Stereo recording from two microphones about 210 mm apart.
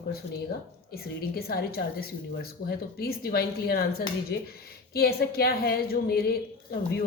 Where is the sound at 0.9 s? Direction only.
45° left (ahead or behind).